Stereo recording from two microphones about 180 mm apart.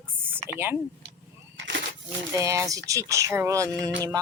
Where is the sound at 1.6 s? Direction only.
90° right.